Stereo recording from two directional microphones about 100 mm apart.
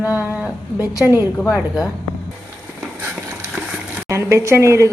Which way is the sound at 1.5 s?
10° right (ahead or behind).